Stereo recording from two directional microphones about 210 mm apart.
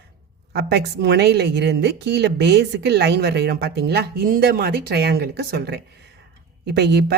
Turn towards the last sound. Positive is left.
turn(degrees=-50)  # may be behind; listen again after turning